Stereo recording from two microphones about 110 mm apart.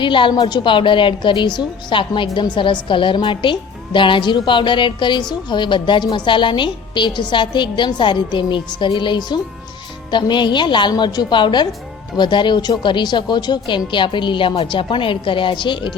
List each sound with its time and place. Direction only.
0.0 s a woman's voice: 50° left (ahead or behind)